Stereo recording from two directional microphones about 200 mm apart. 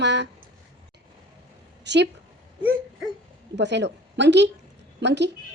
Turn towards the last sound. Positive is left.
turn(degrees=-60)  # may be behind; listen again after turning